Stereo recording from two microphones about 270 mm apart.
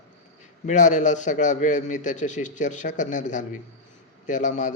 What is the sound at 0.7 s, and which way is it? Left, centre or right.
A man's voice, left.